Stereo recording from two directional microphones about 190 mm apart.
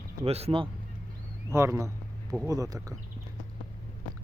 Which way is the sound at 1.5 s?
15° right (ahead or behind).